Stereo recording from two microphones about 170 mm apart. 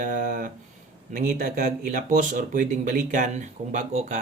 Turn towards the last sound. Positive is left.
turn(degrees=-45)  # may be behind; listen again after turning